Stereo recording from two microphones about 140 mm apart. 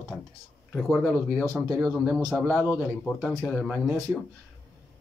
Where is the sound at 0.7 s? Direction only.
5° left (ahead or behind).